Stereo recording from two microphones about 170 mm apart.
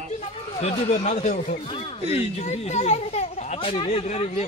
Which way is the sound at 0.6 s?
45° left (ahead or behind).